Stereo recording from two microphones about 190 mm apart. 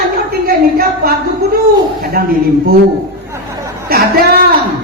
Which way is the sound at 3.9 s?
55° right (ahead or behind).